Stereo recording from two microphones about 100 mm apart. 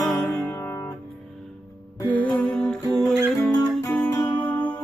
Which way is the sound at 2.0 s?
15° left (ahead or behind).